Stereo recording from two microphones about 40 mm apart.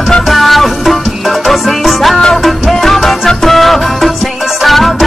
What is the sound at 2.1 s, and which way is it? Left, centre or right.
Music, centre.